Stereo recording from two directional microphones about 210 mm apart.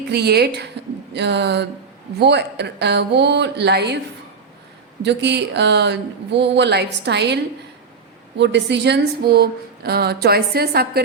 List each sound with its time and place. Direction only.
0.1 s a woman's voice: 50° right (ahead or behind)
5.0 s speech: 55° right (ahead or behind)
8.4 s a woman's voice: 55° right (ahead or behind)